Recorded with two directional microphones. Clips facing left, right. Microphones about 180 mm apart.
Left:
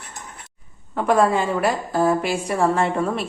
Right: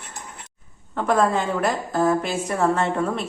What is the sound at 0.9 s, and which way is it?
A woman's voice, 10° left (ahead or behind).